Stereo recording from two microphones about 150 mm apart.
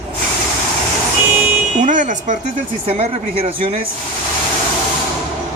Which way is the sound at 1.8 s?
60° right (ahead or behind).